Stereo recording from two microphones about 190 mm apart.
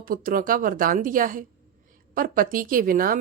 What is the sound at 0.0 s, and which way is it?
A woman's voice, 50° right (ahead or behind).